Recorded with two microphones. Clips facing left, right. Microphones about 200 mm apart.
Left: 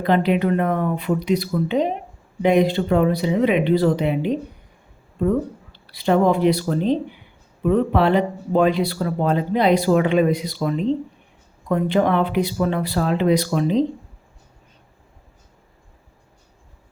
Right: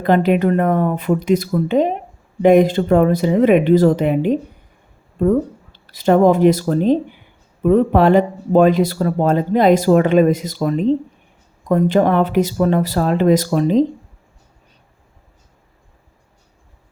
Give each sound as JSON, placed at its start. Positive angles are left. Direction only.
{"t": 0.0, "sound": "speech", "side_deg": -50}
{"t": 5.7, "sound": "speech", "side_deg": -45}